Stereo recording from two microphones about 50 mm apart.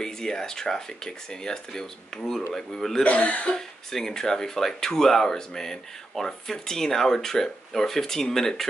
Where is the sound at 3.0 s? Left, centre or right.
Left.